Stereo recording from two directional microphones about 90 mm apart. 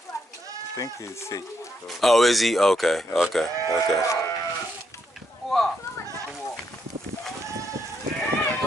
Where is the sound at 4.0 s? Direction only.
35° left (ahead or behind).